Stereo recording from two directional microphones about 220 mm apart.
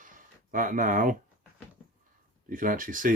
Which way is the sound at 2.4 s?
40° right (ahead or behind).